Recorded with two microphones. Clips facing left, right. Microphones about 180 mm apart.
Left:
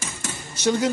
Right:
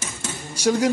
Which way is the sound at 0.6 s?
10° right (ahead or behind).